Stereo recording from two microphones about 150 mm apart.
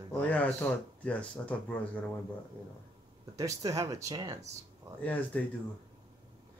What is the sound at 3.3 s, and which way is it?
Speech, 20° right (ahead or behind).